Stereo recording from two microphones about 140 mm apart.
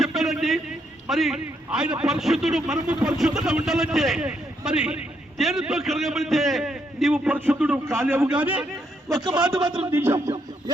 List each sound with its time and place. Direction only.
0.0 s a sound: centre (ahead or behind)
1.0 s a man's voice: centre (ahead or behind)
9.0 s music: 25° right (ahead or behind)